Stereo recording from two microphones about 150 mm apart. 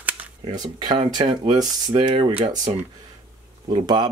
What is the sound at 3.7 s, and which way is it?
Speech, 30° right (ahead or behind).